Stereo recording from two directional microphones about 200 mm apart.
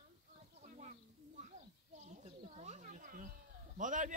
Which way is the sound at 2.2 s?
35° right (ahead or behind).